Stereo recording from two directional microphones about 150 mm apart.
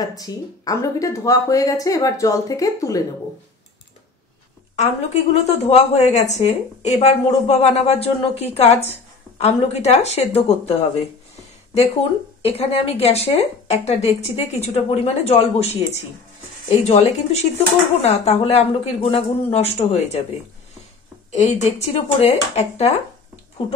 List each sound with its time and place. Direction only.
0.0 s speech: 25° left (ahead or behind)
4.7 s a woman's voice: 45° left (ahead or behind)
12.4 s a woman's voice: 40° left (ahead or behind)
21.3 s a woman's voice: 50° left (ahead or behind)